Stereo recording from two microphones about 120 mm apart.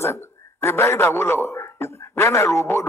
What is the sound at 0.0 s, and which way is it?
A man's voice, 20° left (ahead or behind).